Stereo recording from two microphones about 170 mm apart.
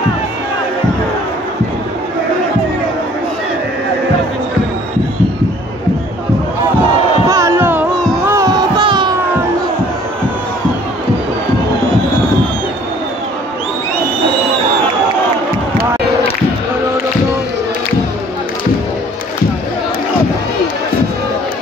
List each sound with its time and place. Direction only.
7.2 s music: 20° right (ahead or behind)